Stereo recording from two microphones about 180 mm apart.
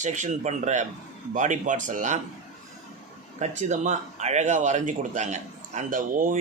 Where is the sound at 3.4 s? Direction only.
40° right (ahead or behind).